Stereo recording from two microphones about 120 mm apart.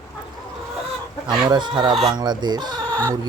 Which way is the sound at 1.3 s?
35° right (ahead or behind).